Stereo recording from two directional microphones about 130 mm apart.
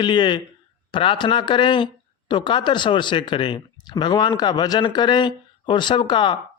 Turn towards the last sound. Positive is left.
turn(degrees=40)  # may be behind; listen again after turning